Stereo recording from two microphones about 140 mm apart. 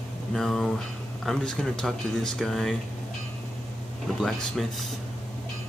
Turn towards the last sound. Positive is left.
turn(degrees=0)  # may be behind; listen again after turning